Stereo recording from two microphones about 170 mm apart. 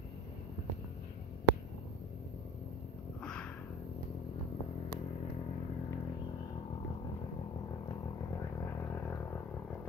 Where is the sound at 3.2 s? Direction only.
5° left (ahead or behind).